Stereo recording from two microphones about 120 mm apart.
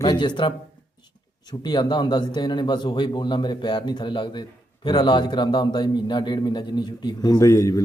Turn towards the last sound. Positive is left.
turn(degrees=25)  # may be behind; listen again after turning